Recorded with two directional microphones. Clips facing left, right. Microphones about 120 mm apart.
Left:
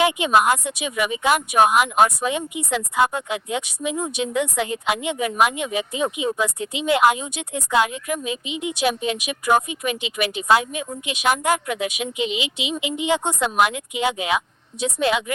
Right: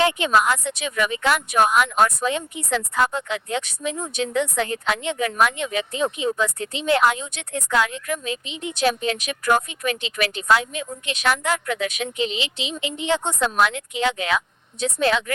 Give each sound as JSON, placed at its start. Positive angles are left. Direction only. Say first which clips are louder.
{"t": 0.0, "sound": "speech", "louder": "left 1 dB", "side_deg": 15}